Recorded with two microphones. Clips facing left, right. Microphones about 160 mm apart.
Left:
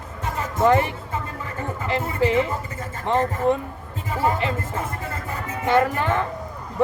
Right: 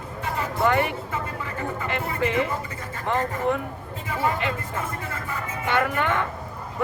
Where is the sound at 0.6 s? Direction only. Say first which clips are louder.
Left 4 dB; 35° left (ahead or behind).